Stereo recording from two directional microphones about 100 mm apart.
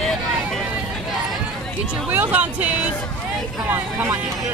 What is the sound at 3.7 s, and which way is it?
Speech, 25° right (ahead or behind).